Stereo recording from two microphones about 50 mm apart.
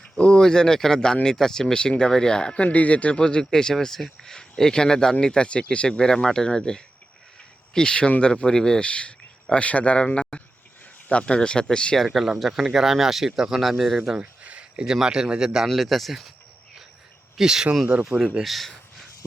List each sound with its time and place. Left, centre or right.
0.2 s speech: centre
2.6 s speech: left; by 8.9 s centre
8.9 s speech: left
11.9 s speech: centre
14.2 s a sound: right
14.8 s speech: centre
15.7 s speech: centre
17.3 s speech: centre
18.4 s a sound: centre